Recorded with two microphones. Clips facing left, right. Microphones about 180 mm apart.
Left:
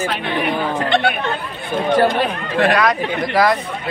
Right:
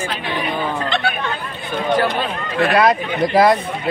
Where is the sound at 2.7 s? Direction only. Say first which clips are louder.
Right 2 dB; 25° right (ahead or behind).